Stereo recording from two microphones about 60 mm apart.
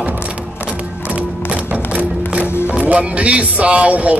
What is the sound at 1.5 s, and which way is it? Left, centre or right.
Music, right.